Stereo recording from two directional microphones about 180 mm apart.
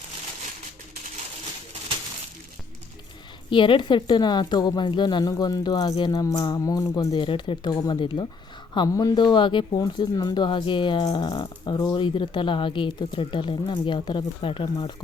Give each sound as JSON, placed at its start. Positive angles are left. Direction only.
{"t": 3.5, "sound": "speech", "side_deg": 25}